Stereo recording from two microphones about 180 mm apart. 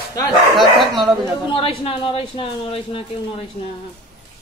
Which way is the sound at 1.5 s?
30° left (ahead or behind).